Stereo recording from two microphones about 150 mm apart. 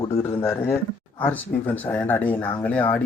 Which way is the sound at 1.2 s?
10° left (ahead or behind).